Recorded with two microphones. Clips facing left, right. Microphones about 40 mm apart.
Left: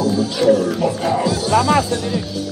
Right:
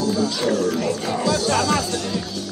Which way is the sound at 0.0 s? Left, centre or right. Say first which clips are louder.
Left 5 dB; centre.